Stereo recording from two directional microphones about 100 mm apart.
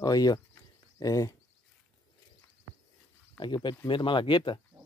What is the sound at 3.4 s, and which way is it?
Speech, 50° left (ahead or behind).